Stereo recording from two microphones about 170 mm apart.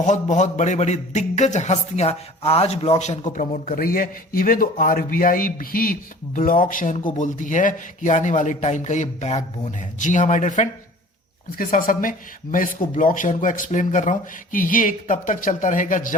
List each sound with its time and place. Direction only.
0.0 s a man's voice: 45° left (ahead or behind)